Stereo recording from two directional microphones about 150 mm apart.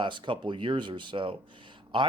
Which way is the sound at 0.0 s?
30° right (ahead or behind).